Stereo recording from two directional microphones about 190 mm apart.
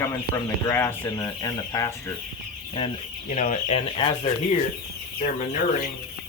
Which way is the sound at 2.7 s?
30° left (ahead or behind).